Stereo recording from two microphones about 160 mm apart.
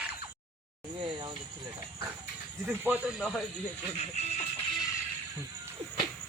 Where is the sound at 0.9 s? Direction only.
30° right (ahead or behind).